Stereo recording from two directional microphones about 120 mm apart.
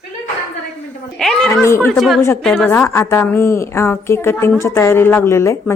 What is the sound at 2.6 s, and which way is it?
Speech, 15° left (ahead or behind).